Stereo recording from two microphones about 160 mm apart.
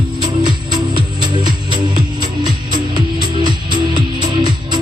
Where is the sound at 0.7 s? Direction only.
30° right (ahead or behind).